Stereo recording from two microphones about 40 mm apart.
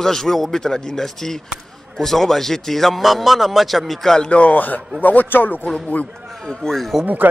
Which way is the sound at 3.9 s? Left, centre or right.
Centre.